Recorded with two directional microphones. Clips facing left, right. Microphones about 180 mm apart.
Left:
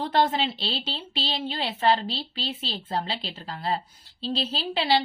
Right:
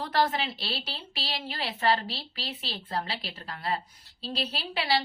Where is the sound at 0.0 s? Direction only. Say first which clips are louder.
Left 4 dB; 25° left (ahead or behind).